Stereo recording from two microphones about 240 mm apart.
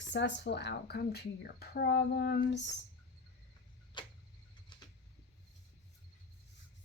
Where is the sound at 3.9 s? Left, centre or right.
Centre.